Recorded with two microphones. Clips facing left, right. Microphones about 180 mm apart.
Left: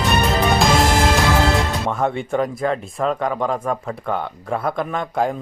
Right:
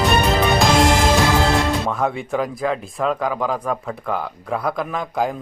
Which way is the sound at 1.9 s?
Centre (ahead or behind).